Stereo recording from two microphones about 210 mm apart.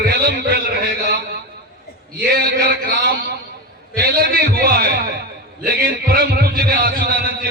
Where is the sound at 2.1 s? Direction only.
50° right (ahead or behind).